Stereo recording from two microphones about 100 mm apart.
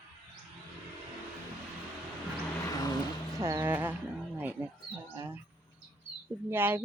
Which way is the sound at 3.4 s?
25° right (ahead or behind).